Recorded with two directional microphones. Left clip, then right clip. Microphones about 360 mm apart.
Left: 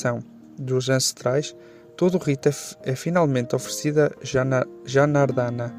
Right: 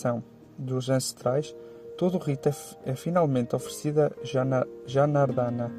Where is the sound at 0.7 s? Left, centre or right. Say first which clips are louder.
Left 6 dB; left.